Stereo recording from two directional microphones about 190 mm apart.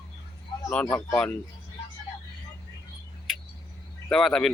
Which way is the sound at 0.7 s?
5° left (ahead or behind).